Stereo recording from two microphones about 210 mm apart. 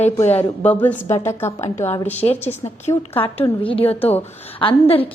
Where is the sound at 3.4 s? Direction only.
25° left (ahead or behind).